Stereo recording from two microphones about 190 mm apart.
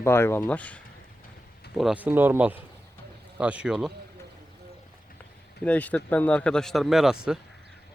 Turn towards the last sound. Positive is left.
turn(degrees=-5)  # may be behind; listen again after turning